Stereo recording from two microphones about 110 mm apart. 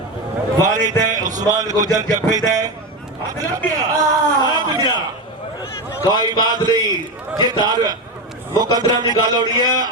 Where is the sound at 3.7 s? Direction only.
35° right (ahead or behind).